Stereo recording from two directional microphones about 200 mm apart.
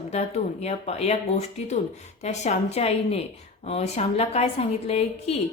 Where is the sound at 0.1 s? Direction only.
35° left (ahead or behind).